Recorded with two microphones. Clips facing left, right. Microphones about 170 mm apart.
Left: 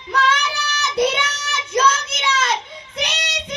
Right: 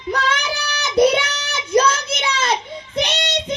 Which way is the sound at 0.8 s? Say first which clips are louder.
Right 5 dB; 35° right (ahead or behind).